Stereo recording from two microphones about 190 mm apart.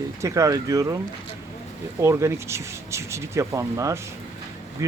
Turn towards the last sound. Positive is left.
turn(degrees=-15)  # may be behind; listen again after turning